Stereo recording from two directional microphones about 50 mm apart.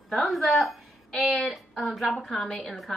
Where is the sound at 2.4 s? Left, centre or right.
Centre.